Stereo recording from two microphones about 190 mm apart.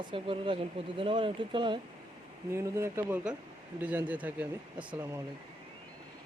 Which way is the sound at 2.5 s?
15° right (ahead or behind).